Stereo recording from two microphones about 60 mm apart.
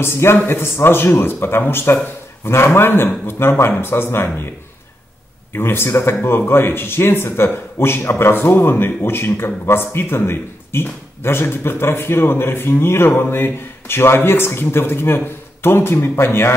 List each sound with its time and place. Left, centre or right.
0.0 s speech: left
5.5 s speech: left